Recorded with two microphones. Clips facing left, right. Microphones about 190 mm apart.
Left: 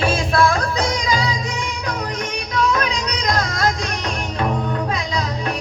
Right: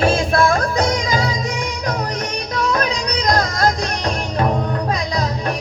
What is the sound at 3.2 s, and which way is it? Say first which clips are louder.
Music: right 3 dB; 40° right (ahead or behind).